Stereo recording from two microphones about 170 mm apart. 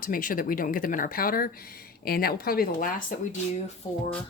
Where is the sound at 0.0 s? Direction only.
55° left (ahead or behind).